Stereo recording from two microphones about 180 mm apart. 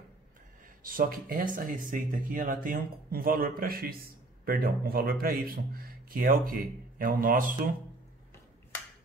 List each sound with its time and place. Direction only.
0.8 s speech: 50° right (ahead or behind)